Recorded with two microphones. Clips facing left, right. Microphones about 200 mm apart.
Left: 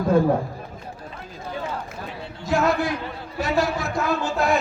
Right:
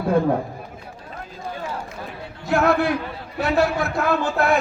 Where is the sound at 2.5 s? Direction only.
60° right (ahead or behind).